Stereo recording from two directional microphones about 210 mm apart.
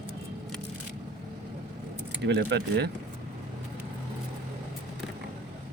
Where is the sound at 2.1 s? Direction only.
55° right (ahead or behind).